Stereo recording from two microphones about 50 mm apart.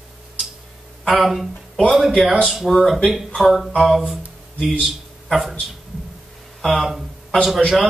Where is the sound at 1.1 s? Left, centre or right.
Centre.